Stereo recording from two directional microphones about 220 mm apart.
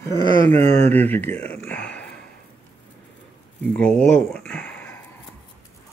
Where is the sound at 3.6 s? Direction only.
5° left (ahead or behind).